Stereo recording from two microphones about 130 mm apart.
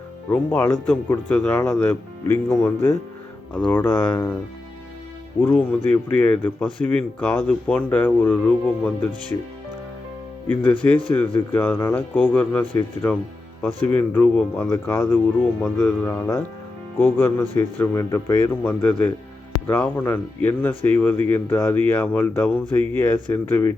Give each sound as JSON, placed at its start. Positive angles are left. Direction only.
{"t": 0.3, "sound": "speech", "side_deg": 15}
{"t": 5.5, "sound": "speech", "side_deg": 15}
{"t": 10.5, "sound": "speech", "side_deg": 10}